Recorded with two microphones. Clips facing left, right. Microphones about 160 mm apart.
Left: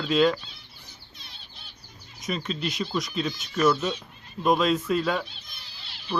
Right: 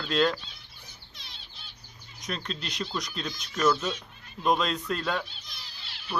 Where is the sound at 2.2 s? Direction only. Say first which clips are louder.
Left 6 dB; 5° left (ahead or behind).